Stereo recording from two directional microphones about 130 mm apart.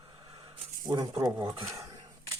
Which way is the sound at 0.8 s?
30° right (ahead or behind).